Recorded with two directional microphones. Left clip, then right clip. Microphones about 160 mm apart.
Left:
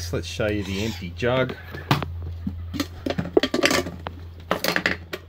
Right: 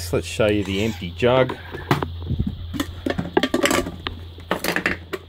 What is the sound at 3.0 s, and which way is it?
Music, 5° left (ahead or behind).